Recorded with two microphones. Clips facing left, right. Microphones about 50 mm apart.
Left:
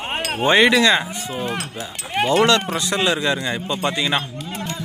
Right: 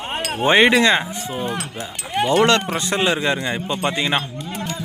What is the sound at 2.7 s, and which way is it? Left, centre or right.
Speech, right.